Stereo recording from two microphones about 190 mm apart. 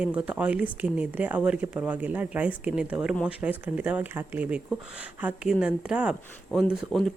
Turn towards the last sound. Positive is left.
turn(degrees=5)  # may be behind; listen again after turning